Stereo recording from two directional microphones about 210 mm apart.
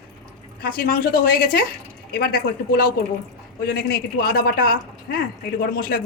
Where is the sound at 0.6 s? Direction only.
45° left (ahead or behind).